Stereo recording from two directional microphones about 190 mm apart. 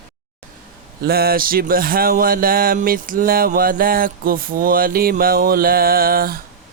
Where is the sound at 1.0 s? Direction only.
55° right (ahead or behind).